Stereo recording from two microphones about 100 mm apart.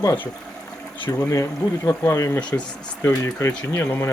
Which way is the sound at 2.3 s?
15° left (ahead or behind).